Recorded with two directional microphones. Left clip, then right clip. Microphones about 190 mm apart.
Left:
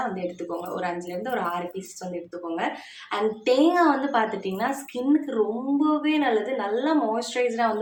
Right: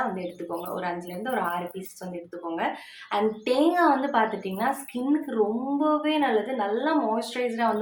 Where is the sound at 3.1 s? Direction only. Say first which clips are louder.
Left 2 dB; 5° left (ahead or behind).